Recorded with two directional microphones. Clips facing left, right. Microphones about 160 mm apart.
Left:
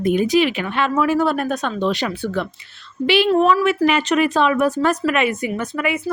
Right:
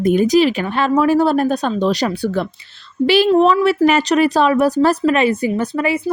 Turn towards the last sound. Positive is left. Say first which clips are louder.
# right 4 dB
turn(degrees=-30)  # may be behind; listen again after turning